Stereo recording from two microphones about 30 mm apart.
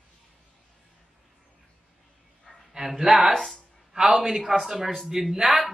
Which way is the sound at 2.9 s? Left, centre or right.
Centre.